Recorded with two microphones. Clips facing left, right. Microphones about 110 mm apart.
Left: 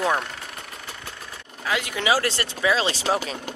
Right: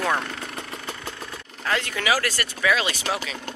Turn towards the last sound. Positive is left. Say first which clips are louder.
# left 2 dB
turn(degrees=30)  # may be behind; listen again after turning